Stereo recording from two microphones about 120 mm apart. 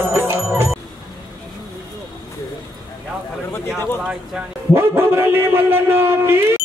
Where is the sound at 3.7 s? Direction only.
20° left (ahead or behind).